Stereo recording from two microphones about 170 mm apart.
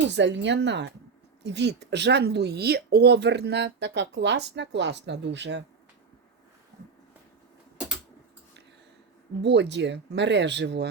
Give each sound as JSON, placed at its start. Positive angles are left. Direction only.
{"t": 0.1, "sound": "speech", "side_deg": -90}
{"t": 9.4, "sound": "speech", "side_deg": -90}